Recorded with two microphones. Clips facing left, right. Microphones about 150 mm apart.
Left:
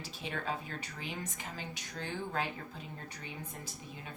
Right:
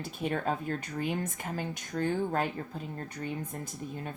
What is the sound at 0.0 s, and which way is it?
Speech, 50° right (ahead or behind).